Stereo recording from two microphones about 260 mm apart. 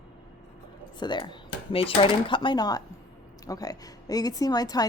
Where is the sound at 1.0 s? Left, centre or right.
Centre.